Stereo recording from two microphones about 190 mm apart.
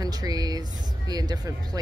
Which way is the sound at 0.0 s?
20° right (ahead or behind).